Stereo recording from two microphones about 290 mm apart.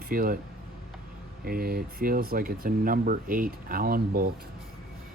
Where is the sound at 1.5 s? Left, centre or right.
Right.